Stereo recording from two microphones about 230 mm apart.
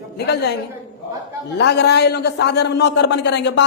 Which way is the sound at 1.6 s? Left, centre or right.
Left.